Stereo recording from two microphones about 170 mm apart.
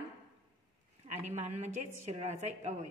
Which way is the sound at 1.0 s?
45° right (ahead or behind).